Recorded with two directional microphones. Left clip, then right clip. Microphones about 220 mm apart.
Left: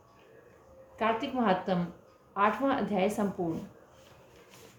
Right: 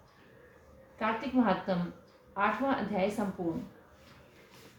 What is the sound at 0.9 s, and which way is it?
Speech, 40° left (ahead or behind).